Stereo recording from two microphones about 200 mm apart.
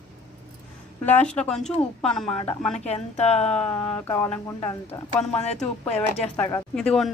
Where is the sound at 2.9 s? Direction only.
35° left (ahead or behind).